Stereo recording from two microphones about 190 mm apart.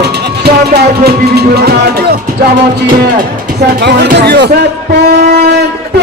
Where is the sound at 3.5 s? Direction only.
55° right (ahead or behind).